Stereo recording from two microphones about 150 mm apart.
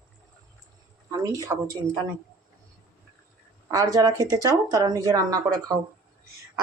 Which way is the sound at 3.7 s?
25° right (ahead or behind).